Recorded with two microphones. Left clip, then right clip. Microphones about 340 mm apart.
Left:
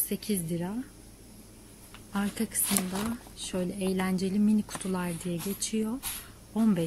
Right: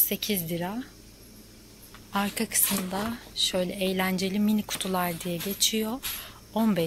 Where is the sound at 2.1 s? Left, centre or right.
Centre.